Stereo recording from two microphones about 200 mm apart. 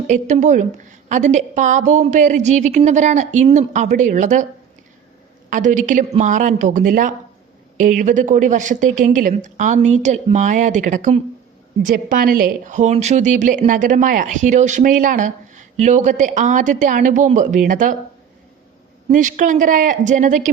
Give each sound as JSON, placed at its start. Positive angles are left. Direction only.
{"t": 0.1, "sound": "speech", "side_deg": -35}
{"t": 5.5, "sound": "speech", "side_deg": -40}
{"t": 19.0, "sound": "speech", "side_deg": -40}